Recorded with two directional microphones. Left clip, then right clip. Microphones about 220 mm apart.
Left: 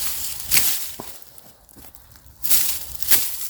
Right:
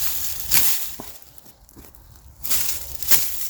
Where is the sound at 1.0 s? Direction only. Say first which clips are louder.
Left 2 dB; 30° left (ahead or behind).